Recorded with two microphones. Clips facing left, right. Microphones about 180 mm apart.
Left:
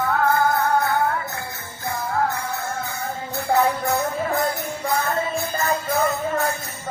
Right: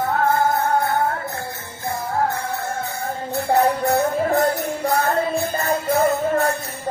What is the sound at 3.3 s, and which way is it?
Music, 35° right (ahead or behind).